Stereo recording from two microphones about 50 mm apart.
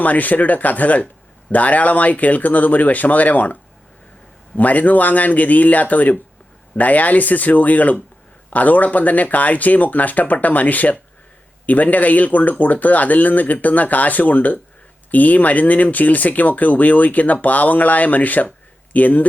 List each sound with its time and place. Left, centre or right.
0.0 s speech: left